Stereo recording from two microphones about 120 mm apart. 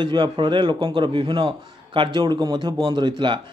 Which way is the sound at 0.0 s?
40° right (ahead or behind).